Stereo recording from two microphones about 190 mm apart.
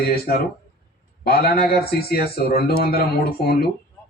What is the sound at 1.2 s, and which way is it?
A man's voice, 55° left (ahead or behind).